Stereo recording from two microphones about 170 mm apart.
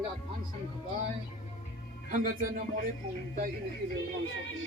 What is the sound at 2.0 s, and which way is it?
Speech, 50° right (ahead or behind).